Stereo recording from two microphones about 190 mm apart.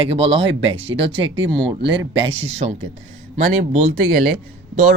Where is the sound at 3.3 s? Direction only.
40° right (ahead or behind).